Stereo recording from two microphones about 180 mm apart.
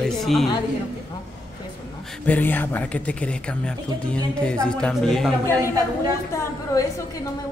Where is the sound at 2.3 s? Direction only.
10° left (ahead or behind).